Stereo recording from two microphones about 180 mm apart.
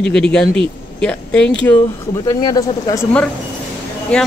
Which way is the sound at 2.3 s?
20° left (ahead or behind).